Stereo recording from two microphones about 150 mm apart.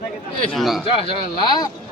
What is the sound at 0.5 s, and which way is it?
Speech, centre (ahead or behind).